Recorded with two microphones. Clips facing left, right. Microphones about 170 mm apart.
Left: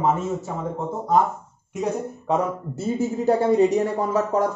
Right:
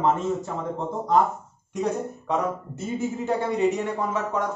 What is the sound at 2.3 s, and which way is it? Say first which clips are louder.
Speech: left 4 dB; 35° left (ahead or behind).